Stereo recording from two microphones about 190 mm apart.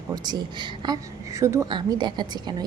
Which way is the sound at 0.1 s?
20° right (ahead or behind).